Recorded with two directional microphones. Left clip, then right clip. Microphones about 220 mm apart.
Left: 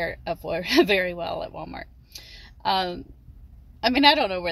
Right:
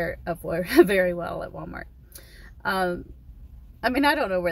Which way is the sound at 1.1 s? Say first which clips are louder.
Left 1 dB; centre (ahead or behind).